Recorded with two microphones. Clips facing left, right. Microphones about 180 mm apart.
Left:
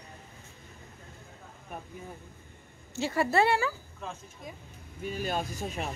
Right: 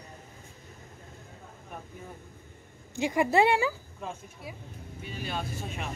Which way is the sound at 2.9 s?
15° right (ahead or behind).